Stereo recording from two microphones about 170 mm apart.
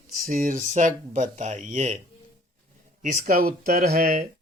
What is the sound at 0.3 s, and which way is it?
Speech, 50° right (ahead or behind).